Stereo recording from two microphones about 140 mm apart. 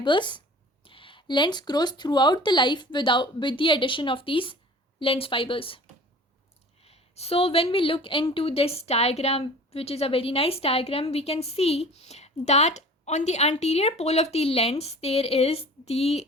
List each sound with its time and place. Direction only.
0.0 s speech: 35° left (ahead or behind)
6.8 s a woman's voice: 45° left (ahead or behind)